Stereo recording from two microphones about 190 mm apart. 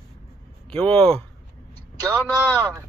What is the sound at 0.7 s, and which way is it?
Speech, 5° left (ahead or behind).